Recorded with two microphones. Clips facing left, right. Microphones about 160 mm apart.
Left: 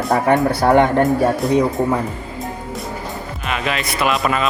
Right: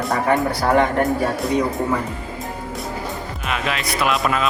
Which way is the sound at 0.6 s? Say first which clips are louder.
Left 4 dB; 30° left (ahead or behind).